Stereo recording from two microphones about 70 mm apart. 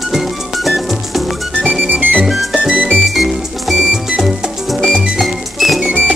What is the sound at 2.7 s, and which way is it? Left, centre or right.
Music, right.